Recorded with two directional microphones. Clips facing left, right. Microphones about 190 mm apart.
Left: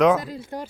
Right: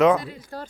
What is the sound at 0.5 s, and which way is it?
Speech, 20° left (ahead or behind).